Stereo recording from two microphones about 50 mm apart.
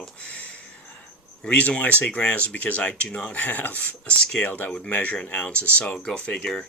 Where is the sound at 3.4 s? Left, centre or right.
Left.